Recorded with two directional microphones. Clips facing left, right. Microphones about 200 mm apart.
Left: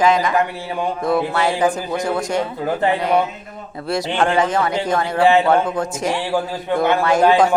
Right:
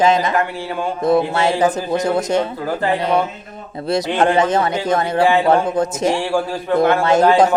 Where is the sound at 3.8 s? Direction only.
20° right (ahead or behind).